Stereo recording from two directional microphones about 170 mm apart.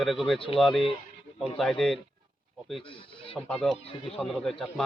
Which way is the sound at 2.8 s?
30° left (ahead or behind).